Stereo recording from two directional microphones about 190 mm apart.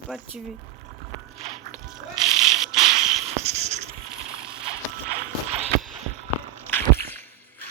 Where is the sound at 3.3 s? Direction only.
35° right (ahead or behind).